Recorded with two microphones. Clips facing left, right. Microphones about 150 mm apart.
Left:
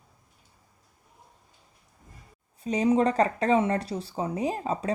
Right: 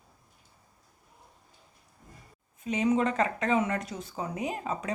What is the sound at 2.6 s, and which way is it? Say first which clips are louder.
Speech: left 3 dB; 35° left (ahead or behind).